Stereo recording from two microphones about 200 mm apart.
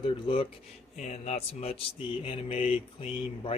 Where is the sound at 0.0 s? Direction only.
25° left (ahead or behind).